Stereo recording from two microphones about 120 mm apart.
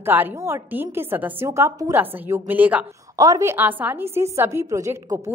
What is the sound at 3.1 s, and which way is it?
Speech, 30° right (ahead or behind).